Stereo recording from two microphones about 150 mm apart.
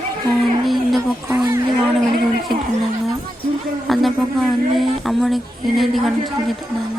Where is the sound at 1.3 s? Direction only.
20° right (ahead or behind).